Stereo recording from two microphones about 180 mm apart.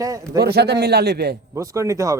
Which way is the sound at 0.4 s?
65° right (ahead or behind).